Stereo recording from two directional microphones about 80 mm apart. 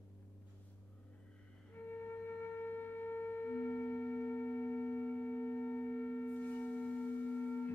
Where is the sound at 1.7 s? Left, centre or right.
Left.